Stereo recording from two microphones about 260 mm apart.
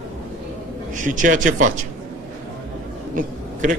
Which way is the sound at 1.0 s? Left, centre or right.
Right.